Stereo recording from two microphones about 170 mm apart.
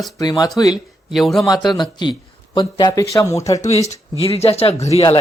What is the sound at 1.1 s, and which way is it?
Speech, centre (ahead or behind).